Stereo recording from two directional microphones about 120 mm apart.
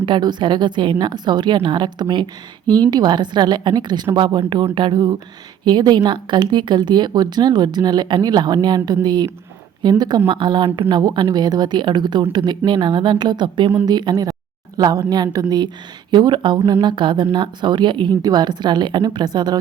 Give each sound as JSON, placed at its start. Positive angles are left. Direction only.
{"t": 0.0, "sound": "speech", "side_deg": -40}